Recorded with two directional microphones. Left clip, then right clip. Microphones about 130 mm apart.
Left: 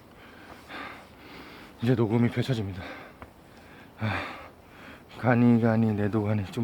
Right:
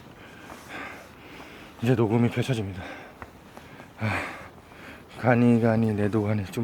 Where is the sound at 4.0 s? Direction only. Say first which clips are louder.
Right 2 dB; 15° left (ahead or behind).